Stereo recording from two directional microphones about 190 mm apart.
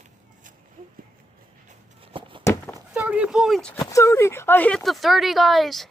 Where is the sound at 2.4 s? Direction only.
15° left (ahead or behind).